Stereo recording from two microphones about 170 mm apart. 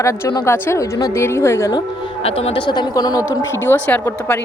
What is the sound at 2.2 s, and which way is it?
A woman's voice, 35° left (ahead or behind).